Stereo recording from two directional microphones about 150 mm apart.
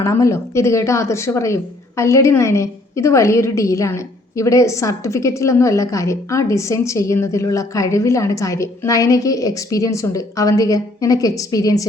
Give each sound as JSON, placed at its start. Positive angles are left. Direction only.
{"t": 0.0, "sound": "a woman's voice", "side_deg": 20}